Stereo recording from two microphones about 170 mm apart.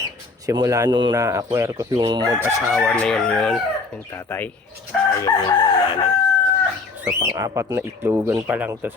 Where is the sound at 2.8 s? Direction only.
5° left (ahead or behind).